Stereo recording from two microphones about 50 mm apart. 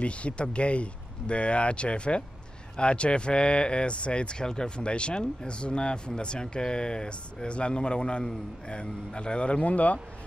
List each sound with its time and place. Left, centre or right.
0.0 s speech: left